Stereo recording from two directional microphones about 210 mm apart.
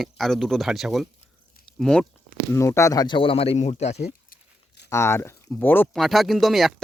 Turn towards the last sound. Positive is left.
turn(degrees=0)  # may be behind; listen again after turning